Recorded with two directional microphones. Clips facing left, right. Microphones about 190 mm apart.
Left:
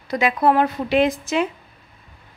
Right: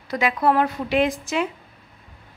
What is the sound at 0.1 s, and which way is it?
A woman's voice, 20° left (ahead or behind).